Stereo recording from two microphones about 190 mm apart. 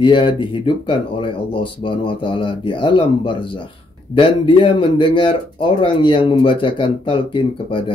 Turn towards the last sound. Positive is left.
turn(degrees=25)  # may be behind; listen again after turning